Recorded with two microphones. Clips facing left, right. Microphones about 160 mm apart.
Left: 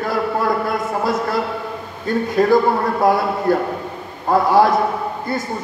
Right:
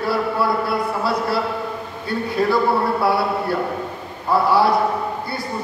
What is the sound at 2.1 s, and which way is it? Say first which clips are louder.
A man's voice: left 5 dB; 45° left (ahead or behind).